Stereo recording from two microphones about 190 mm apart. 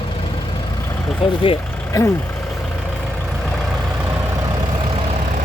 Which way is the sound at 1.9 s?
15° left (ahead or behind).